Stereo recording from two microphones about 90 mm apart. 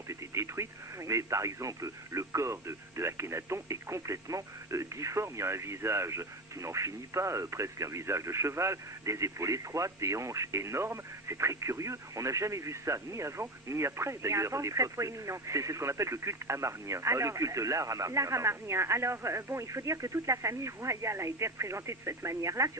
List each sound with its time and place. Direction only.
0.1 s speech: 35° right (ahead or behind)